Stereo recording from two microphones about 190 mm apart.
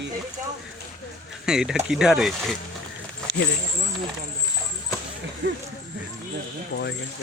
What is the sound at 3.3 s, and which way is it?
Snake, 75° right (ahead or behind).